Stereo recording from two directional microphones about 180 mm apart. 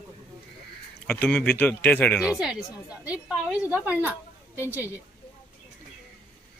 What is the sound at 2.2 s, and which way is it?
A woman's voice, 5° right (ahead or behind).